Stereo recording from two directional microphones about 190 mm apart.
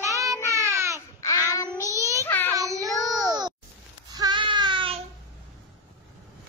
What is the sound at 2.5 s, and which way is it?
Child singing, 15° right (ahead or behind).